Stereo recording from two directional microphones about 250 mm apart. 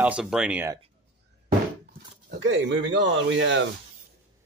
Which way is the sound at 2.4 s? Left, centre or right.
Right.